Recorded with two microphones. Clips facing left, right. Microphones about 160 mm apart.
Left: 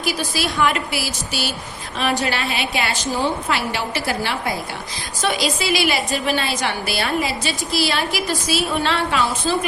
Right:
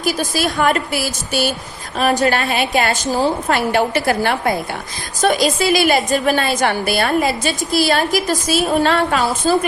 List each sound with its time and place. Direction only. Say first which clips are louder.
0.0 s a woman's voice: right 4 dB; 45° right (ahead or behind)